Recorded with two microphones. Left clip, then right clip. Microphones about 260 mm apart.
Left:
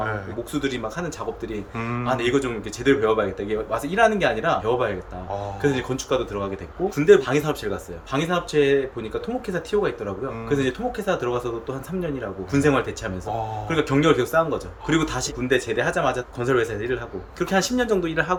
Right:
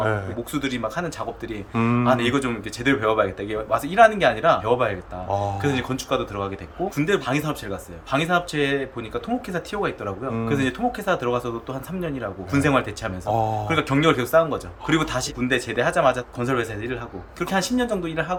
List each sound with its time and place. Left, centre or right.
0.5 s speech: centre
1.7 s speech: right
2.0 s speech: centre
13.3 s speech: right
13.7 s speech: centre